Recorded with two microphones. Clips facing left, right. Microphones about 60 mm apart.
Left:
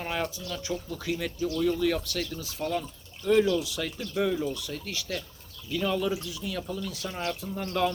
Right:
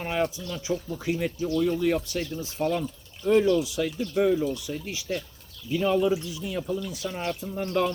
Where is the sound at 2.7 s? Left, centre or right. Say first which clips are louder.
Right 3 dB; centre.